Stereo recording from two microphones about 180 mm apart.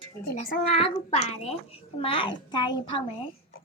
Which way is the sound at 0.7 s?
35° left (ahead or behind).